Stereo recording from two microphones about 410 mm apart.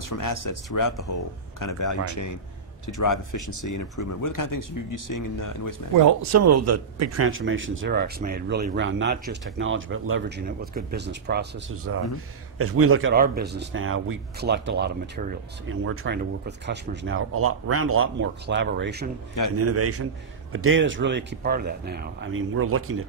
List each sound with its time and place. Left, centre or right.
0.1 s speech: left
5.9 s a man's voice: right